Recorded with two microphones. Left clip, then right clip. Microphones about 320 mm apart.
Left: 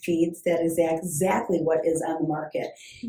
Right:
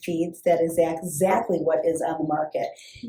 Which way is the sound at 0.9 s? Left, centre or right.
Centre.